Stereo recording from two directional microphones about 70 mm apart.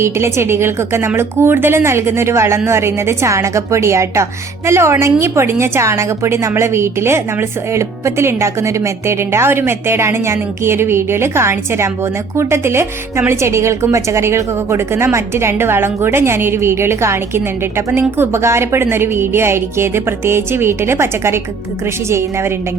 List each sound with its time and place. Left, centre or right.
0.0 s a woman's voice: right